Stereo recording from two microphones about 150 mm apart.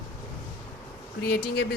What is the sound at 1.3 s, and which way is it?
Speech, 90° left.